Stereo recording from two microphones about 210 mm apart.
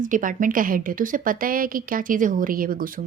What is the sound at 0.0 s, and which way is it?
A woman's voice, 40° right (ahead or behind).